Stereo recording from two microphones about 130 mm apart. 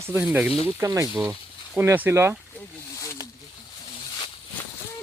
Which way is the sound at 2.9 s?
25° left (ahead or behind).